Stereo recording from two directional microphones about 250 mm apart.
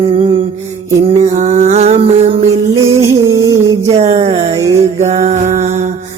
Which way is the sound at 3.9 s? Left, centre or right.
Right.